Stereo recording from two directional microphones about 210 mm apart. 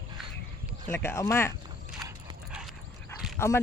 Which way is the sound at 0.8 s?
10° left (ahead or behind).